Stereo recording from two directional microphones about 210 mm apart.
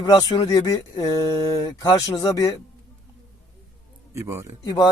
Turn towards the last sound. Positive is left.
turn(degrees=20)  # may be behind; listen again after turning